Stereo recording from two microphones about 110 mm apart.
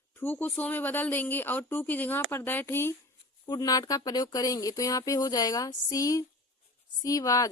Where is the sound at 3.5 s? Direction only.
35° left (ahead or behind).